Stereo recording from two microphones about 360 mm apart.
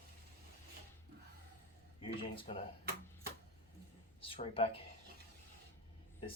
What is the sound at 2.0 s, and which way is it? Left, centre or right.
Speech, centre.